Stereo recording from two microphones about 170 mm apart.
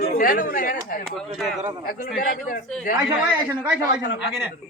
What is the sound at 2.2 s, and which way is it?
Speech, 50° left (ahead or behind).